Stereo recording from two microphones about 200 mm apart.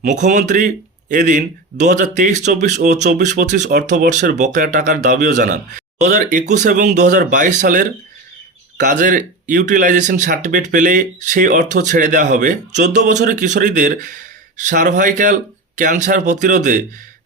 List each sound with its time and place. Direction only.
0.0 s speech: 35° right (ahead or behind)